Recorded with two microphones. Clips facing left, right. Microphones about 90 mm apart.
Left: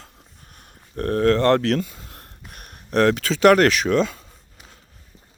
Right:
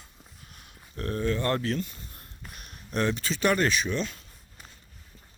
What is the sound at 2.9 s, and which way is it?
Speech, 90° left.